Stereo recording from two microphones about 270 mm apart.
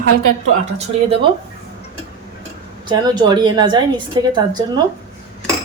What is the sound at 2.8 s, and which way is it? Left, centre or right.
A woman's voice, centre.